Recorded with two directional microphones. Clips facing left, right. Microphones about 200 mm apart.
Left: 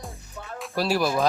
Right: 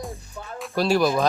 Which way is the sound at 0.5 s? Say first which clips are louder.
Right 3 dB; centre (ahead or behind).